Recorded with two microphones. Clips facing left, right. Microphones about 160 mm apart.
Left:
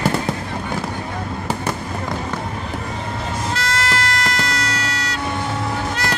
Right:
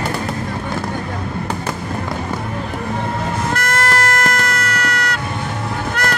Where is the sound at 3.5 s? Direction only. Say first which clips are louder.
Right 3 dB; 55° right (ahead or behind).